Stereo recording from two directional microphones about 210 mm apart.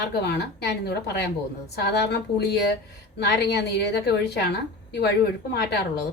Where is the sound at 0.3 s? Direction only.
50° left (ahead or behind).